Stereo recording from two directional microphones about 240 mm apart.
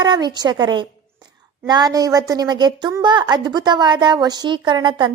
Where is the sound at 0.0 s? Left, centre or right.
Centre.